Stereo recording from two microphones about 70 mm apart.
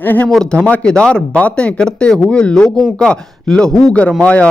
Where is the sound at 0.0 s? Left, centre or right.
Left.